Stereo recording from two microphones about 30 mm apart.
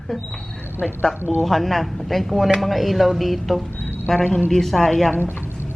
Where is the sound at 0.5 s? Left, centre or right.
Left.